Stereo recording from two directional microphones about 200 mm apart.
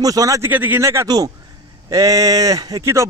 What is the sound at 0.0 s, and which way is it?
Speech, 15° right (ahead or behind).